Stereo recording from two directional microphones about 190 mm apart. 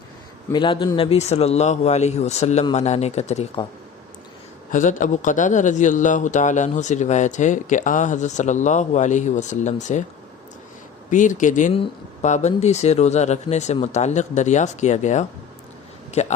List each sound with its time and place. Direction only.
0.5 s a man's voice: 25° left (ahead or behind)
4.7 s a man's voice: 45° left (ahead or behind)
11.1 s a man's voice: 45° left (ahead or behind)